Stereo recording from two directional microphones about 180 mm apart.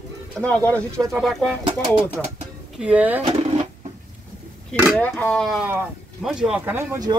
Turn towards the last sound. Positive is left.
turn(degrees=-20)  # may be behind; listen again after turning